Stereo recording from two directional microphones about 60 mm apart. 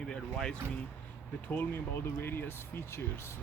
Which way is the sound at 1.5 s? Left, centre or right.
Left.